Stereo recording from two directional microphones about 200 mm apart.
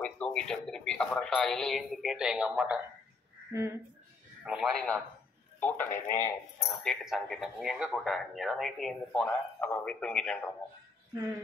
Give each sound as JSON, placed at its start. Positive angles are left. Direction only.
{"t": 0.0, "sound": "speech", "side_deg": 5}
{"t": 4.5, "sound": "a man's voice", "side_deg": 0}
{"t": 6.8, "sound": "speech", "side_deg": 0}